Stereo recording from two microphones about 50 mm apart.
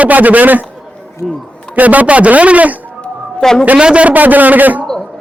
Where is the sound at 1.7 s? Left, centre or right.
Right.